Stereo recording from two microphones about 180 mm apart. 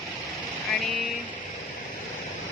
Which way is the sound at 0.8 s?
Centre (ahead or behind).